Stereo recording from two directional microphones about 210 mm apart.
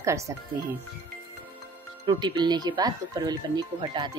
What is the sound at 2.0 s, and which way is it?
Speech, 20° right (ahead or behind).